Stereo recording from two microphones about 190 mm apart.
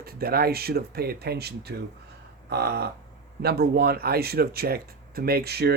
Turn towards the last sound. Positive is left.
turn(degrees=-55)  # may be behind; listen again after turning